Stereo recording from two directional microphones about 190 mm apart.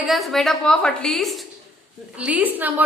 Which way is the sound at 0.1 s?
Centre (ahead or behind).